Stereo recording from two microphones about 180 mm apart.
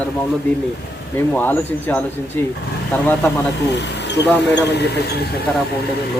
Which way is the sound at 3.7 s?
75° left (ahead or behind).